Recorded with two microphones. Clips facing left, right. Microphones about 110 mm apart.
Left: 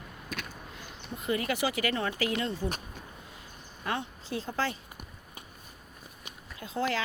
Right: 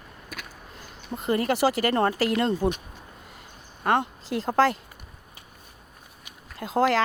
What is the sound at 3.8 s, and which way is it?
Speech, 50° right (ahead or behind).